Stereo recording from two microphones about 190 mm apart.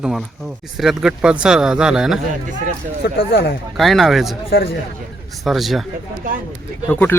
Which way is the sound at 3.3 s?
60° left (ahead or behind).